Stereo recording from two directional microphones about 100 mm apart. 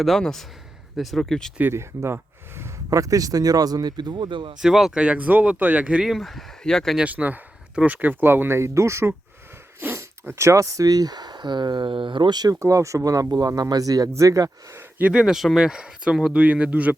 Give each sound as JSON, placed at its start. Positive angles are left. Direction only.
{"t": 0.0, "sound": "speech", "side_deg": 5}
{"t": 1.5, "sound": "speech", "side_deg": -25}
{"t": 4.6, "sound": "speech", "side_deg": -5}
{"t": 6.9, "sound": "speech", "side_deg": -15}
{"t": 14.9, "sound": "speech", "side_deg": -15}